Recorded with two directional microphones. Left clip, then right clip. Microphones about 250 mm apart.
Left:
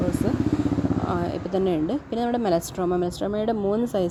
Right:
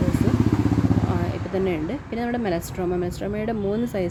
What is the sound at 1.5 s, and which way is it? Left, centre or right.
Speech, left.